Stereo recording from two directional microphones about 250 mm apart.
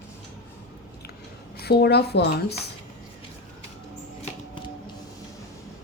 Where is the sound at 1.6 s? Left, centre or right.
Left.